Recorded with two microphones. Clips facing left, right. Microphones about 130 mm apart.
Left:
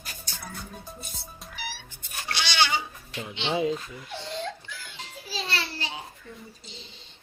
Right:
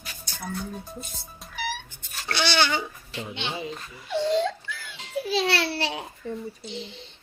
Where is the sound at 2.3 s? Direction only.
50° right (ahead or behind).